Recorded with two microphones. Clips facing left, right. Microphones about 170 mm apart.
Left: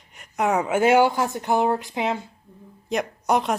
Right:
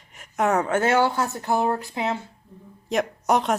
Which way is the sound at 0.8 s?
15° left (ahead or behind).